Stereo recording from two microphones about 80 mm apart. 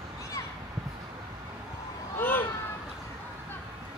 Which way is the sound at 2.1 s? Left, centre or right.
Left.